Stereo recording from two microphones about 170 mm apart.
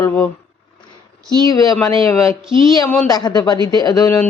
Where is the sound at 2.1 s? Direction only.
15° left (ahead or behind).